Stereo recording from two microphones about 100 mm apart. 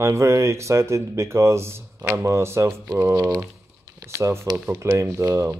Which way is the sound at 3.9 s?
30° right (ahead or behind).